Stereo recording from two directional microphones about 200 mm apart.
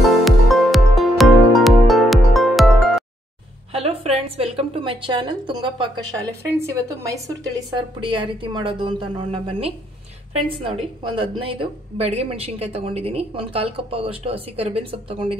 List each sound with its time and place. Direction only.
0.0 s music: centre (ahead or behind)
3.7 s a woman's voice: 30° right (ahead or behind)
7.7 s a woman's voice: 25° right (ahead or behind)